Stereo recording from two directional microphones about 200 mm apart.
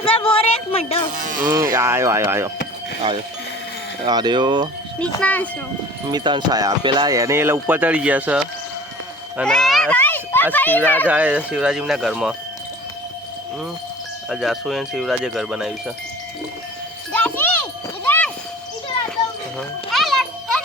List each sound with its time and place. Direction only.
0.0 s a sound: 25° left (ahead or behind)
1.2 s music: 40° right (ahead or behind)
1.5 s speech: 15° right (ahead or behind)
4.0 s speech: 20° right (ahead or behind)
4.9 s a child's voice: 5° left (ahead or behind)
6.1 s speech: 20° right (ahead or behind)
9.5 s a child's voice: centre (ahead or behind)
11.0 s speech: 5° right (ahead or behind)
14.3 s speech: centre (ahead or behind)
17.1 s music: 10° left (ahead or behind)
19.1 s children playing: centre (ahead or behind)